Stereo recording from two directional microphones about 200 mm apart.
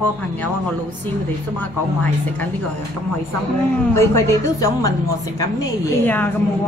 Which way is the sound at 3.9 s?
15° left (ahead or behind).